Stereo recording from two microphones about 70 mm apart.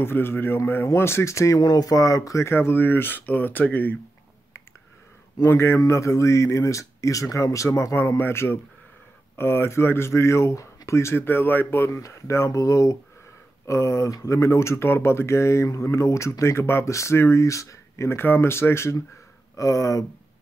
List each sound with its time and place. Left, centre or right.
0.0 s speech: left
1.6 s speech: left
2.5 s speech: left
5.5 s speech: left
11.9 s speech: left
19.5 s speech: left